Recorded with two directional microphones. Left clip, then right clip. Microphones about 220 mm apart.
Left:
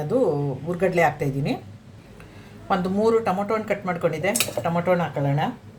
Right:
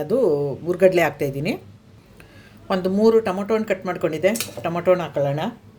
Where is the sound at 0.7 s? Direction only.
45° right (ahead or behind).